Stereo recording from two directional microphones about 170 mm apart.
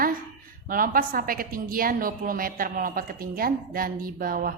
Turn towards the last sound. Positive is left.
turn(degrees=-60)  # may be behind; listen again after turning